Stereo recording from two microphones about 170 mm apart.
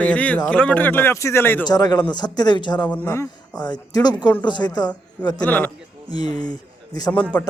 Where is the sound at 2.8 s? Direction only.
10° left (ahead or behind); by 4.9 s 25° left (ahead or behind).